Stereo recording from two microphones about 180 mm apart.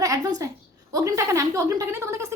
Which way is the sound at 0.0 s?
20° right (ahead or behind).